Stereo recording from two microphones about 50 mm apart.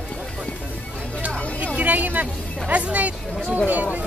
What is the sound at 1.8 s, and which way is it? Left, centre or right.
Vehicle, right.